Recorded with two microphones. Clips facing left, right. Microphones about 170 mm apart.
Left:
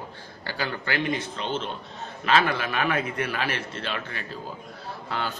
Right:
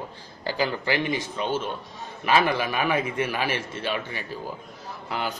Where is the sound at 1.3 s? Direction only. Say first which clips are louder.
Right 3 dB; 10° right (ahead or behind).